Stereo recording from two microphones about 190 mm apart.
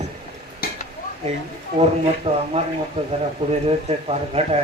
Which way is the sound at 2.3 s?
35° right (ahead or behind).